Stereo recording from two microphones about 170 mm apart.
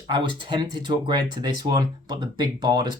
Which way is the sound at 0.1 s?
30° right (ahead or behind).